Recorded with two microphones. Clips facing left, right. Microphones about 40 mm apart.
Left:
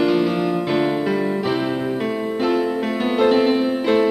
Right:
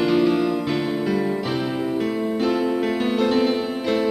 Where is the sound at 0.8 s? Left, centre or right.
Left.